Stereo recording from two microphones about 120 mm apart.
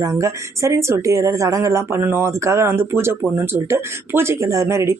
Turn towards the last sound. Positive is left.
turn(degrees=-25)  # may be behind; listen again after turning